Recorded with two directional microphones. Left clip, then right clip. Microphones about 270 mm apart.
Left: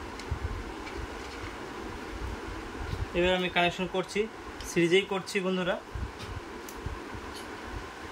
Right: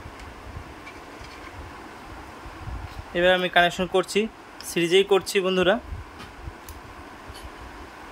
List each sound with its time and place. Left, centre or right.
3.2 s speech: centre